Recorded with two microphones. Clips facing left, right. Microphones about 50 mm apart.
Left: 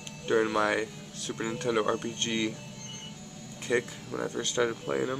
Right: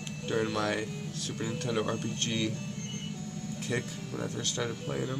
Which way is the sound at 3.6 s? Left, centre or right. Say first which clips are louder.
Left 6 dB; left.